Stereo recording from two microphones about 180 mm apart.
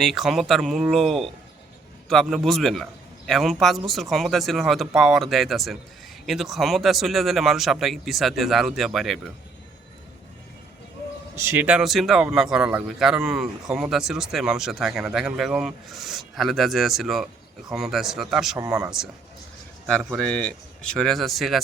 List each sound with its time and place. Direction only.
0.0 s a man's voice: centre (ahead or behind)
11.5 s a man's voice: 5° right (ahead or behind)
18.5 s speech: 20° right (ahead or behind)
20.2 s a man's voice: 5° left (ahead or behind)